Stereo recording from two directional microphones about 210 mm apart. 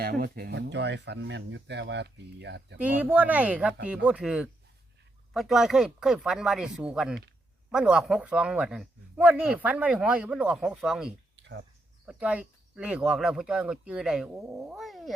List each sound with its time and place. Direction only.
0.0 s speech: 45° right (ahead or behind)
2.7 s a man's voice: 5° right (ahead or behind)